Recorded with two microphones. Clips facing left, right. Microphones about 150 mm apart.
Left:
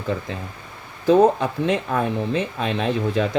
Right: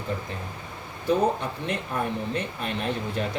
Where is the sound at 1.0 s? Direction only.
90° left.